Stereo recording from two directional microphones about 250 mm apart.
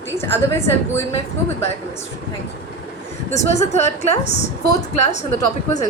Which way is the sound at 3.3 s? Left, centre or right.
Left.